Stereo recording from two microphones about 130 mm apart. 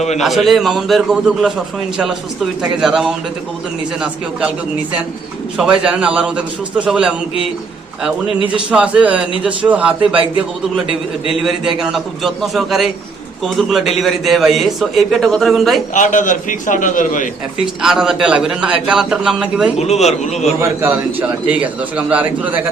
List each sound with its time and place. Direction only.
0.2 s a man's voice: centre (ahead or behind)
2.6 s a man's voice: 5° right (ahead or behind)
5.8 s a man's voice: 10° right (ahead or behind)
8.7 s a man's voice: 10° right (ahead or behind)
10.8 s a man's voice: 40° right (ahead or behind)
11.4 s a man's voice: 5° right (ahead or behind)
16.0 s a man's voice: 80° left
17.8 s a man's voice: 5° right (ahead or behind)
19.8 s speech: 55° left (ahead or behind)
20.6 s a man's voice: 15° right (ahead or behind)